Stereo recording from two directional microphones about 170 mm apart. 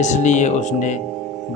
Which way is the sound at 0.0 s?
45° left (ahead or behind).